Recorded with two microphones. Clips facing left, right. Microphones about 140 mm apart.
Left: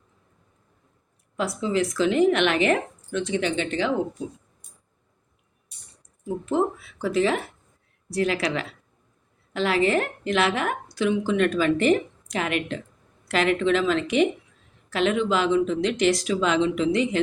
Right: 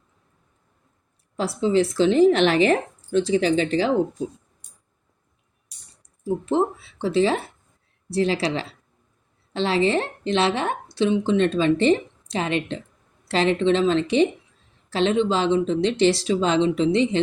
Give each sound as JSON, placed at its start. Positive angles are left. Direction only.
{"t": 1.4, "sound": "a woman's voice", "side_deg": -30}
{"t": 6.2, "sound": "a woman's voice", "side_deg": -30}